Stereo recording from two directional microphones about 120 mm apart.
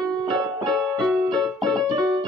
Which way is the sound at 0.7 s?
Centre (ahead or behind).